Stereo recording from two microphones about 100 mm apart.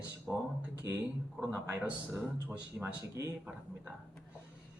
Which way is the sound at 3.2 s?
30° right (ahead or behind).